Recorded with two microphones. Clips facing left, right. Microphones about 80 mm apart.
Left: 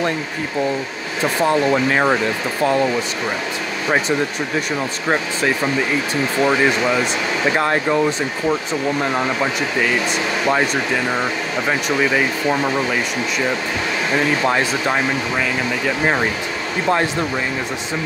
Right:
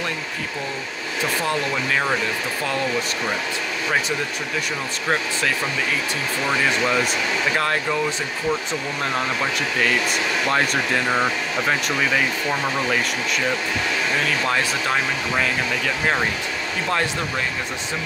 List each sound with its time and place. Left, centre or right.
1.2 s speech: left
5.0 s speech: centre
7.4 s speech: left
11.6 s speech: centre
14.1 s speech: left